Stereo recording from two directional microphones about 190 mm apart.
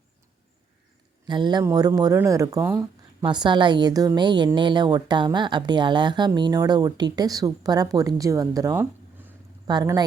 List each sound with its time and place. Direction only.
1.3 s speech: 25° right (ahead or behind)